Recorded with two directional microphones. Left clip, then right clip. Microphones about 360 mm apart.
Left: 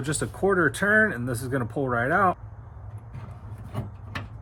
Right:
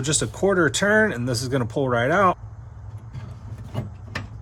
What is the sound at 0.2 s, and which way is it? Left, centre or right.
Speech, centre.